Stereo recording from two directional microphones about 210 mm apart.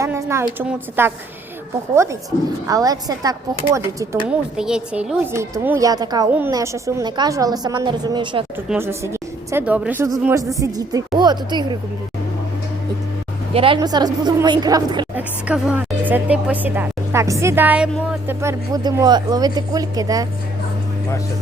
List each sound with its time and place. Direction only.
0.0 s speech: 15° right (ahead or behind)
2.6 s speech: 15° right (ahead or behind)
4.3 s a woman's voice: 5° right (ahead or behind); by 8.4 s 20° right (ahead or behind)
8.7 s a woman's voice: 10° right (ahead or behind)
13.5 s a woman's voice: 25° right (ahead or behind)
15.1 s speech: 5° right (ahead or behind)